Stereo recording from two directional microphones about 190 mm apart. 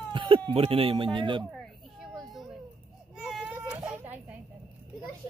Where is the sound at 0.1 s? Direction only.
25° right (ahead or behind).